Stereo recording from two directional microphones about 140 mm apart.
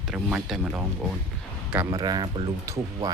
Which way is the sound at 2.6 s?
20° right (ahead or behind).